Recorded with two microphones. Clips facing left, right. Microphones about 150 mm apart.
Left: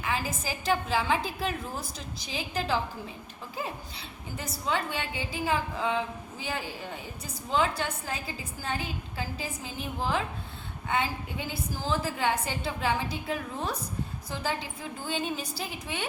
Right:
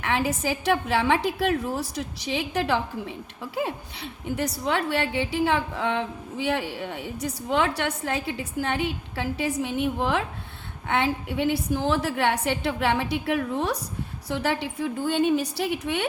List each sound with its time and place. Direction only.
0.0 s a woman's voice: 70° right (ahead or behind)